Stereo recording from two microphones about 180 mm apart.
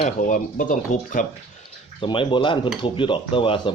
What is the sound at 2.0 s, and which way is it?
Speech, 30° left (ahead or behind).